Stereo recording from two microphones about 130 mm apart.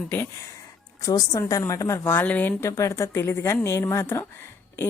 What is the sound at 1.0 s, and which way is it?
A woman's voice, 25° left (ahead or behind).